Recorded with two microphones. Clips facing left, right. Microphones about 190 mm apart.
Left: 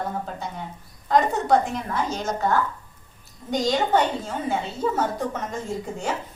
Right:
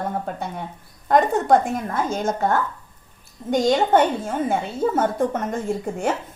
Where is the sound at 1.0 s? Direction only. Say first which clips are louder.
Right 3 dB; 50° right (ahead or behind).